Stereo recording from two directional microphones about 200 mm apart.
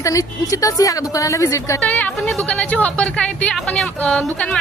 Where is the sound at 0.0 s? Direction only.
15° left (ahead or behind).